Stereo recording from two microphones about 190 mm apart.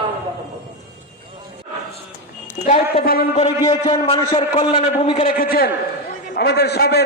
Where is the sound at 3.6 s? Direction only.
20° left (ahead or behind).